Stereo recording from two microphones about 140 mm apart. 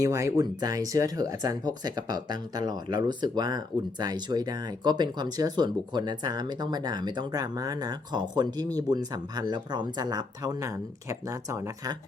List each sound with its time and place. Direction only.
0.0 s speech: 20° right (ahead or behind)